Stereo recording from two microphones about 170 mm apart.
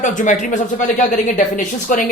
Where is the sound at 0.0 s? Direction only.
45° left (ahead or behind).